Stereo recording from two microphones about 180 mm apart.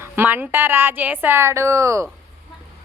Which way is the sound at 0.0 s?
10° right (ahead or behind).